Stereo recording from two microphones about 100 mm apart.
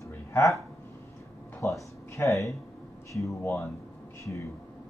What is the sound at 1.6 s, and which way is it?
Speech, 30° left (ahead or behind).